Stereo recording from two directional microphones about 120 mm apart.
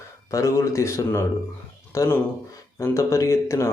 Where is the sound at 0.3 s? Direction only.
25° left (ahead or behind).